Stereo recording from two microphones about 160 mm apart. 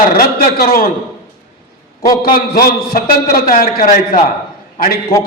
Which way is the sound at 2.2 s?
70° left (ahead or behind).